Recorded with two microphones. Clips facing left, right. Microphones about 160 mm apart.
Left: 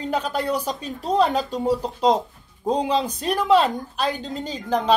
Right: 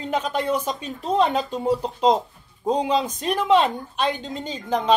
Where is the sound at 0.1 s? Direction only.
35° left (ahead or behind).